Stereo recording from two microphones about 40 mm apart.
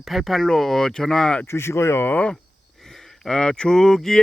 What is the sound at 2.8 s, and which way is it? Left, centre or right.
Speech, centre.